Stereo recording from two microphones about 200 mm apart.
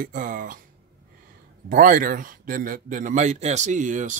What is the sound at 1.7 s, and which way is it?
Speech, 45° right (ahead or behind).